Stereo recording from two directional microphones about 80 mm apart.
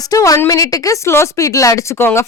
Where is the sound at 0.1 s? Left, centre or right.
Left.